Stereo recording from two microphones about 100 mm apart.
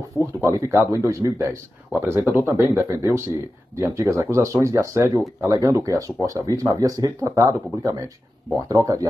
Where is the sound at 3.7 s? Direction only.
30° right (ahead or behind).